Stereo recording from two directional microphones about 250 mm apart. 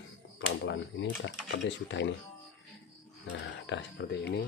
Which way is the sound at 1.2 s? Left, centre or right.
Left.